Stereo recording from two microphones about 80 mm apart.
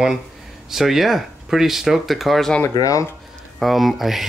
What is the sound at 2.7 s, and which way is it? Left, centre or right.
Speech, left.